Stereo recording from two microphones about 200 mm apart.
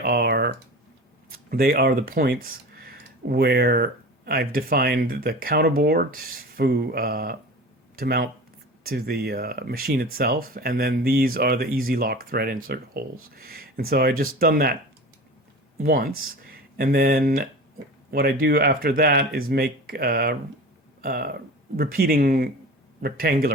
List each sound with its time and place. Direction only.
0.0 s typing: 50° right (ahead or behind)
1.3 s speech: 50° right (ahead or behind)
15.8 s speech: 45° right (ahead or behind)